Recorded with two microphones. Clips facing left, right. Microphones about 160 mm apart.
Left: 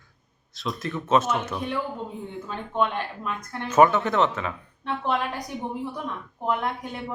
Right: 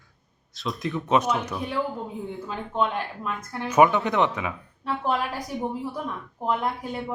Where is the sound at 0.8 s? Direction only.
15° right (ahead or behind).